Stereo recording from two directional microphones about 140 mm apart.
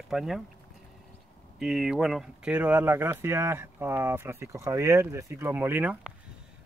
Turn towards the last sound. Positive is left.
turn(degrees=-10)  # may be behind; listen again after turning